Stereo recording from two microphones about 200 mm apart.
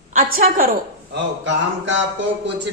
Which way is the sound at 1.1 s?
65° right (ahead or behind).